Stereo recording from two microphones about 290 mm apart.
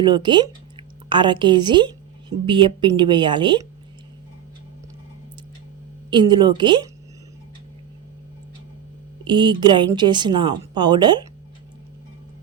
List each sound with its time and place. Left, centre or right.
0.0 s speech: centre
6.1 s speech: centre
9.2 s speech: centre